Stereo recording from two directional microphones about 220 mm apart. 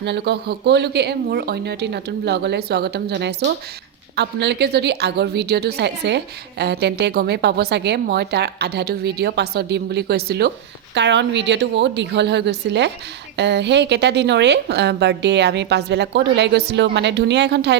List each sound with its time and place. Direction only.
0.0 s a woman's voice: 50° right (ahead or behind)